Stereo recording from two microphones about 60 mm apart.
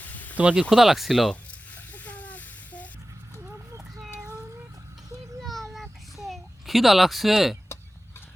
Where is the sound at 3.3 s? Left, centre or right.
Right.